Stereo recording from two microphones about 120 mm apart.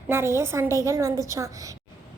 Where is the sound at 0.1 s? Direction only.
20° right (ahead or behind).